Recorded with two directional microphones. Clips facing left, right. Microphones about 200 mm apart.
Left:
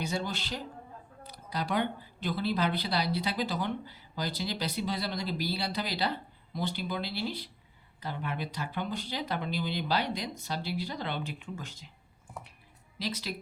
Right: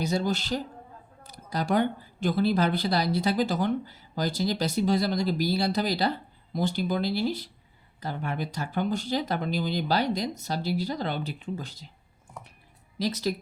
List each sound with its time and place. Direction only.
0.0 s a woman's voice: 40° right (ahead or behind)
13.0 s a woman's voice: 45° right (ahead or behind)